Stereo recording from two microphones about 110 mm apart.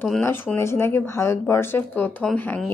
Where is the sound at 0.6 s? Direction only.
25° left (ahead or behind).